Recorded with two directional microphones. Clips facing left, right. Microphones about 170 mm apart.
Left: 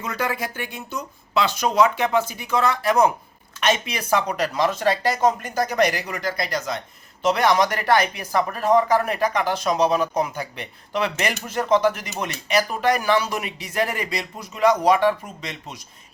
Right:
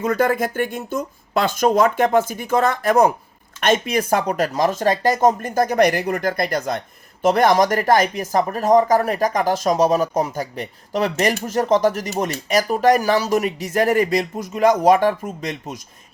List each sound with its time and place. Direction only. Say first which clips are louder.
0.0 s speech: right 8 dB; 50° right (ahead or behind)